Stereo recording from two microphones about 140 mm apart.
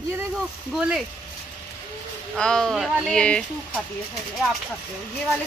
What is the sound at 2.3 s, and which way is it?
Speech, 5° left (ahead or behind).